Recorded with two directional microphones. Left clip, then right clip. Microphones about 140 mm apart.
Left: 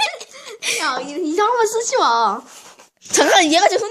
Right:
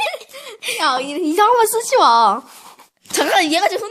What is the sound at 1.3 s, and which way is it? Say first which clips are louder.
Speech: right 3 dB; 40° right (ahead or behind).